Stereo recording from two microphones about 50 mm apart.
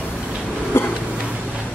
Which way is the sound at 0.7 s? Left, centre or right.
Left.